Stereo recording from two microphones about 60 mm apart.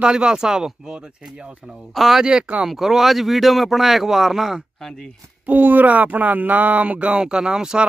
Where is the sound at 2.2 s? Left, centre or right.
Centre.